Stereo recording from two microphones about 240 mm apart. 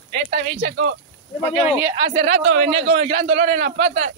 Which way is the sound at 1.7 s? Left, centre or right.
Centre.